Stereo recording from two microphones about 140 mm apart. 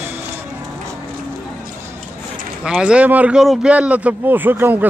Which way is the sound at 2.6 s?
5° right (ahead or behind).